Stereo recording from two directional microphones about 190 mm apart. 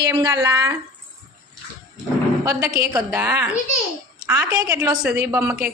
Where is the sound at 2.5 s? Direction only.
15° right (ahead or behind).